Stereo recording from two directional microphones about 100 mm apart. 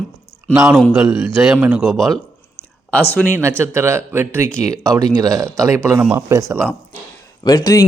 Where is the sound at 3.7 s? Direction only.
25° right (ahead or behind).